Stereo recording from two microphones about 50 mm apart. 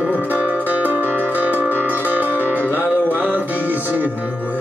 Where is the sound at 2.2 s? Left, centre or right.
Left.